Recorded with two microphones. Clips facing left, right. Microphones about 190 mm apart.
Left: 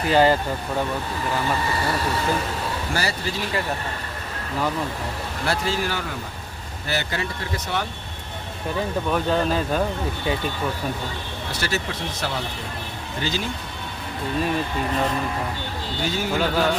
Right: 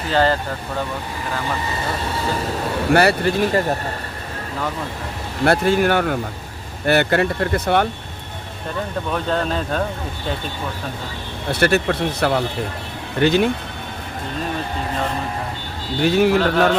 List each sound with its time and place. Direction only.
0.1 s speech: 15° left (ahead or behind)
2.9 s speech: 60° right (ahead or behind); by 3.8 s 45° right (ahead or behind)
5.5 s speech: 60° right (ahead or behind)
9.1 s speech: 5° left (ahead or behind)
11.5 s speech: 60° right (ahead or behind)
16.0 s speech: 60° right (ahead or behind)